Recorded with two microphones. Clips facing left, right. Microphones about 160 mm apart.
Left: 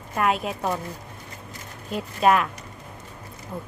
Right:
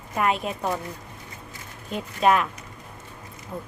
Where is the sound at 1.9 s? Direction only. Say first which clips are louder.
Left 1 dB; centre (ahead or behind).